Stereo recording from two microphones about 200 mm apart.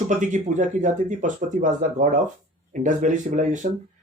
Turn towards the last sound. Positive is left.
turn(degrees=-40)  # may be behind; listen again after turning